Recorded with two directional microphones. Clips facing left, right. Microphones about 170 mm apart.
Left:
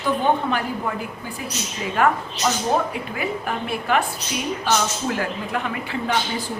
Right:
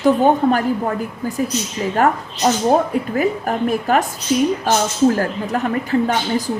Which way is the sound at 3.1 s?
40° right (ahead or behind).